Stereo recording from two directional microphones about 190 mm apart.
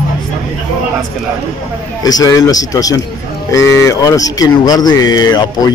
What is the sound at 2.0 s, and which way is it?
Speech, 20° left (ahead or behind).